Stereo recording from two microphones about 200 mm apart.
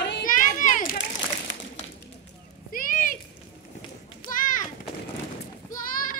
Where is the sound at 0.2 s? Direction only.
40° left (ahead or behind).